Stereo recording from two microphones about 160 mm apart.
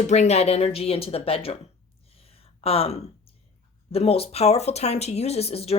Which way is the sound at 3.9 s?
40° left (ahead or behind).